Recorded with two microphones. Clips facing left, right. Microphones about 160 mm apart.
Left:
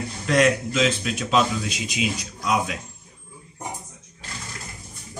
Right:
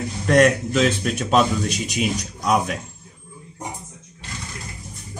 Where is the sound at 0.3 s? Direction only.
50° right (ahead or behind).